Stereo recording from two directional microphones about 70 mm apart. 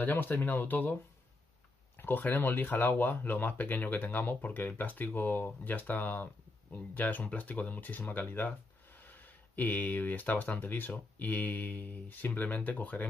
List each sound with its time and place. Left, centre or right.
0.0 s speech: left
2.0 s speech: left